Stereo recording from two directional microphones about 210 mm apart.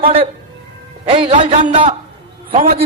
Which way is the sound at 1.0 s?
25° right (ahead or behind).